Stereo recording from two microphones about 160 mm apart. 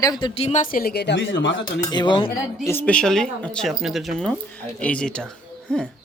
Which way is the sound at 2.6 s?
10° left (ahead or behind).